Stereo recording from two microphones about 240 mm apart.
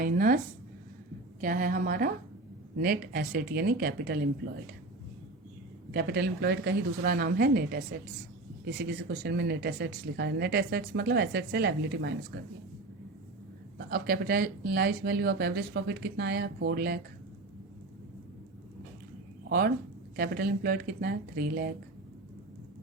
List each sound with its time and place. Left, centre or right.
0.0 s a sound: right
1.4 s speech: right
5.9 s speech: right
13.7 s speech: right
19.5 s speech: right